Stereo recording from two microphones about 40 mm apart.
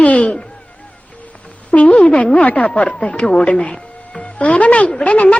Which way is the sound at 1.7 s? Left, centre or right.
Left.